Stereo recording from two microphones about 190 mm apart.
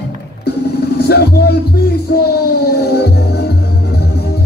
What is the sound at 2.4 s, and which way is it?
Music, 60° left (ahead or behind).